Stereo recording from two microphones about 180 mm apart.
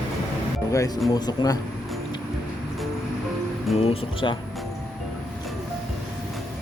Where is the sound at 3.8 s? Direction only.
30° left (ahead or behind).